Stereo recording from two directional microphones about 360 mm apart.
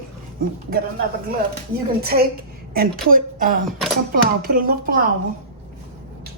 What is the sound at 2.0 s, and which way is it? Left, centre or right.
A woman's voice, right.